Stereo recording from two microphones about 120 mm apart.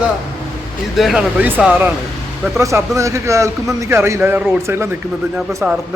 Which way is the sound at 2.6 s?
25° right (ahead or behind).